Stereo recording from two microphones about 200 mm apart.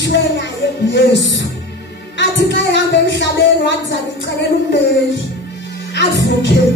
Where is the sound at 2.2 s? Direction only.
60° left (ahead or behind).